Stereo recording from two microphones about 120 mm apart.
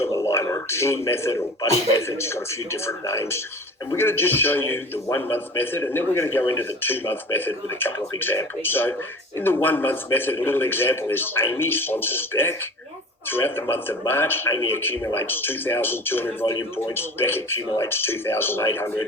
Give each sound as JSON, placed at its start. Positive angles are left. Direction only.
{"t": 0.0, "sound": "a man's voice", "side_deg": 25}